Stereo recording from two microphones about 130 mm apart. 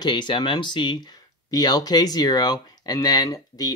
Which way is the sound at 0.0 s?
35° left (ahead or behind).